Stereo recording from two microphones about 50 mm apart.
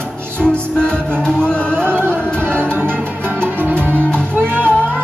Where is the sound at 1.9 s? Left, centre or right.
Right.